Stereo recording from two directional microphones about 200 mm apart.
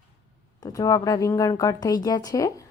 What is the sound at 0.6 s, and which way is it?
A woman's voice, 20° left (ahead or behind).